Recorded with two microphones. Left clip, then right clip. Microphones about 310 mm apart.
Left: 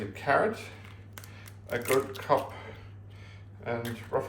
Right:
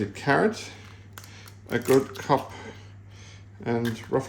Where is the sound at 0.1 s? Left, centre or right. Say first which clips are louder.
Right 2 dB; right.